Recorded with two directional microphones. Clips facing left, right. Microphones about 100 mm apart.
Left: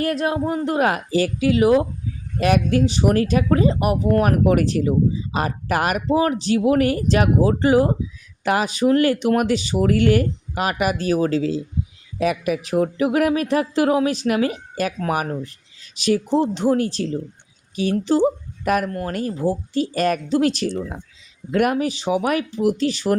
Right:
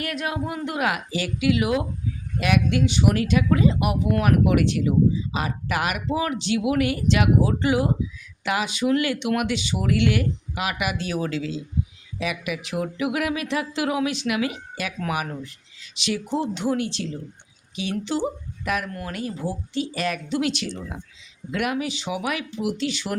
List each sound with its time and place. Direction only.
0.0 s speech: 35° left (ahead or behind)